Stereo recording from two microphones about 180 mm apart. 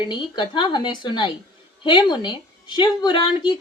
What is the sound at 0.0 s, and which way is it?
A woman's voice, 25° left (ahead or behind).